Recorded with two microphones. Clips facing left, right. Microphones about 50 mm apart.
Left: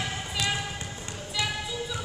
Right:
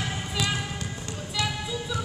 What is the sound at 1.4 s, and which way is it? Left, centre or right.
Music, left.